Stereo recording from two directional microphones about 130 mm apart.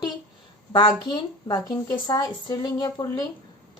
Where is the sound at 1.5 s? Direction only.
30° left (ahead or behind).